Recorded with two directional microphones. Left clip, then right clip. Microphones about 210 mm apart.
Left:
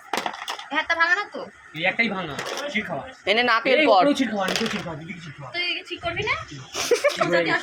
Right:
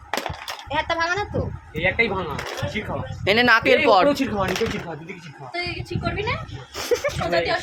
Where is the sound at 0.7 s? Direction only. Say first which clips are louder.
Left 2 dB; 20° right (ahead or behind).